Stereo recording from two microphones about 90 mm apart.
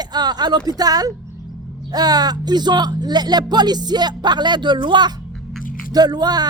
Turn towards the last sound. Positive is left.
turn(degrees=-50)  # may be behind; listen again after turning